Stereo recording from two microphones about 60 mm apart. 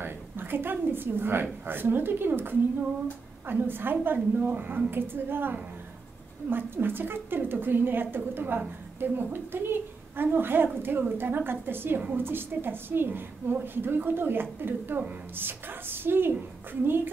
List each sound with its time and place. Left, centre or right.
0.0 s a woman's voice: right